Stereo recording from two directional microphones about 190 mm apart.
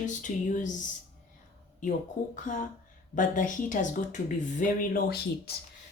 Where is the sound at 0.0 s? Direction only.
40° left (ahead or behind).